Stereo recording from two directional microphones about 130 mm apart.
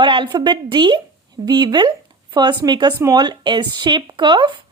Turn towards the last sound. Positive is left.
turn(degrees=-35)  # may be behind; listen again after turning